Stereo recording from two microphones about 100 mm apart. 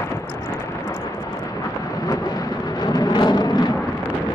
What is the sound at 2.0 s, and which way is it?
Vehicle, 40° left (ahead or behind).